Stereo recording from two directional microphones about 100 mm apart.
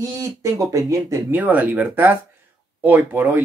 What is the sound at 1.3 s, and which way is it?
Speech, 15° right (ahead or behind).